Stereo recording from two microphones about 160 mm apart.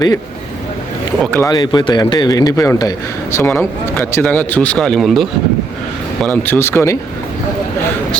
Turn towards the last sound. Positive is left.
turn(degrees=15)  # may be behind; listen again after turning